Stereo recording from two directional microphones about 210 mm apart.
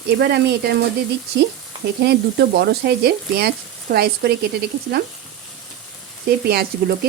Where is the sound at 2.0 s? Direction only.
50° right (ahead or behind).